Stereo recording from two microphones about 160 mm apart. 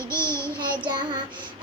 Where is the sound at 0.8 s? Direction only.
30° right (ahead or behind).